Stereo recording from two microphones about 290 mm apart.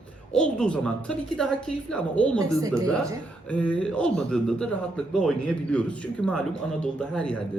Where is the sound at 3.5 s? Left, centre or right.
Centre.